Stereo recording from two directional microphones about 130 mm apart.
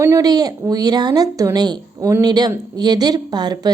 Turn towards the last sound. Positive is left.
turn(degrees=-30)  # may be behind; listen again after turning